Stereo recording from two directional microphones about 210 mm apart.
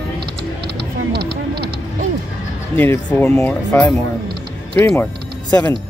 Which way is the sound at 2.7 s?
10° left (ahead or behind).